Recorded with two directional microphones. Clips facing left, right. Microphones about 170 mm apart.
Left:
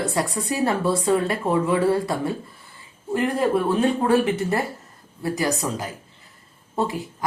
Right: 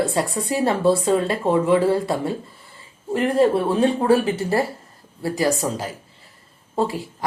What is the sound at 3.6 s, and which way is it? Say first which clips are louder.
Speech: right 2 dB; 30° right (ahead or behind).